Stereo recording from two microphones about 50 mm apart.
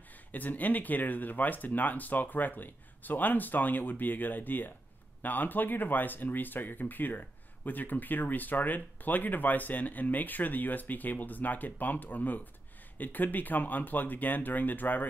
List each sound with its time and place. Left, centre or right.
0.3 s speech: left